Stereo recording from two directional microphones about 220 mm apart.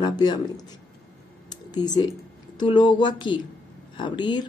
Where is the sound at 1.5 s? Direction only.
20° left (ahead or behind).